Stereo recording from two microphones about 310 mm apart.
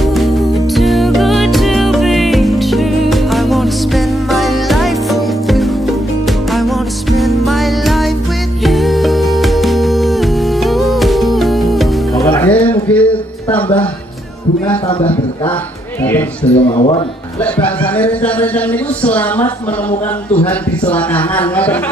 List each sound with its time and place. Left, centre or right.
0.1 s music: centre
12.9 s a sound: centre
16.4 s speech: centre
17.9 s speech: centre